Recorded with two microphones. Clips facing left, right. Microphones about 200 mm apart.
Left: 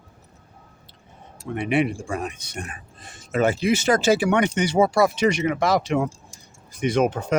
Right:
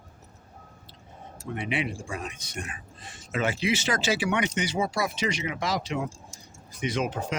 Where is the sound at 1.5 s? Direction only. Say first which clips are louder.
Left 8 dB; 50° left (ahead or behind).